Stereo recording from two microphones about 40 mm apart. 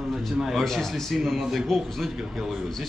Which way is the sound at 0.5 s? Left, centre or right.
Centre.